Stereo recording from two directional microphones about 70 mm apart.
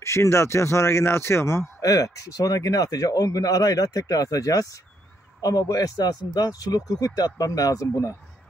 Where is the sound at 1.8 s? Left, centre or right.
Left.